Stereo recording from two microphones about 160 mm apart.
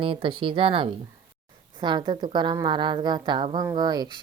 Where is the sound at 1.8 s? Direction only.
30° right (ahead or behind).